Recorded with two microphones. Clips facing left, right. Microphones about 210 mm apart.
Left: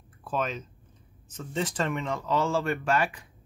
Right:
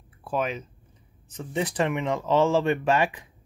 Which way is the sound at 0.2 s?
10° right (ahead or behind).